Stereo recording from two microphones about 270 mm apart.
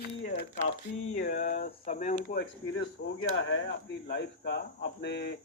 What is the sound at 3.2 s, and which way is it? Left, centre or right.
Speech, left.